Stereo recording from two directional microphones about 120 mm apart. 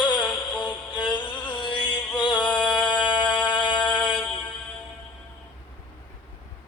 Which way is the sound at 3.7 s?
5° left (ahead or behind).